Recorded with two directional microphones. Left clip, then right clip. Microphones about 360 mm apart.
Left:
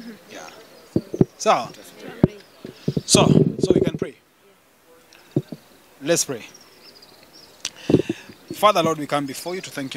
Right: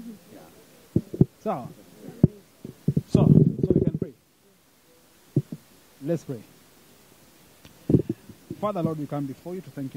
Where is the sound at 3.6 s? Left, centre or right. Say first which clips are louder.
Left 6 dB; centre.